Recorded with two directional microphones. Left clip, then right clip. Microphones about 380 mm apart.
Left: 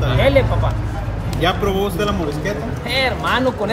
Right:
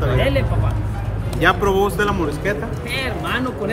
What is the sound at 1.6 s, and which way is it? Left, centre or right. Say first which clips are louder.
Speech: right 2 dB; centre.